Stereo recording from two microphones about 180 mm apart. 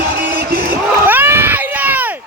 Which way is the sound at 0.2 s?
55° right (ahead or behind).